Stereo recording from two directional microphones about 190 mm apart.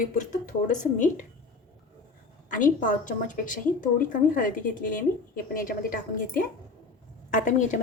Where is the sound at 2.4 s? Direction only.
45° left (ahead or behind).